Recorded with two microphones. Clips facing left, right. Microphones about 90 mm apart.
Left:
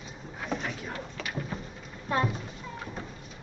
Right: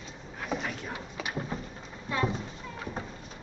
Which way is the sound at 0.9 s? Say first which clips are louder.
Even; 15° right (ahead or behind).